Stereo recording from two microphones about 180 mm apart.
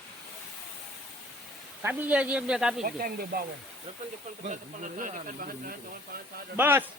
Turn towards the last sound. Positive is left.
turn(degrees=-10)  # may be behind; listen again after turning